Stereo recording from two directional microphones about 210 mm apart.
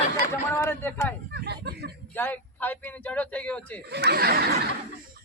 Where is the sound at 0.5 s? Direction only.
10° left (ahead or behind).